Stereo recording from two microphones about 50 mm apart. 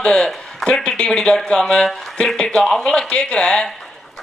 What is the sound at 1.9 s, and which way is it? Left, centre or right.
Speech, centre.